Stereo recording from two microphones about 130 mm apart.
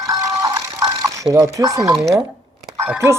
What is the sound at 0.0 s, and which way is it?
Music, 25° right (ahead or behind).